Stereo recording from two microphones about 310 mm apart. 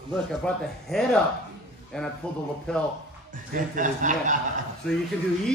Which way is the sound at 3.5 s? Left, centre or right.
Right.